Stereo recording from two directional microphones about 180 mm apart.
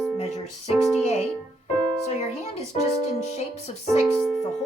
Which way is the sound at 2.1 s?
35° left (ahead or behind).